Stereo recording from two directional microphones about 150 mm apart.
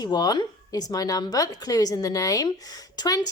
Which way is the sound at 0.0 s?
25° left (ahead or behind).